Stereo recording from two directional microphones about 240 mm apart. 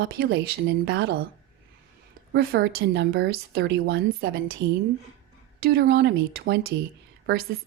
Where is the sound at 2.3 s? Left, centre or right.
Right.